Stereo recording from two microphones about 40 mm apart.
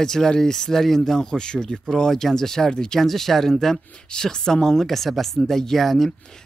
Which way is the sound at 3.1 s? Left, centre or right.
Centre.